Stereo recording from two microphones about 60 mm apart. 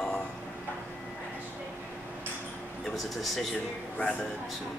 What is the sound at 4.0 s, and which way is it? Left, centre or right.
Speech, centre.